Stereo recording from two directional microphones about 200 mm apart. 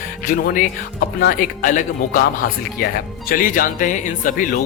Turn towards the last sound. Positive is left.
turn(degrees=40)  # may be behind; listen again after turning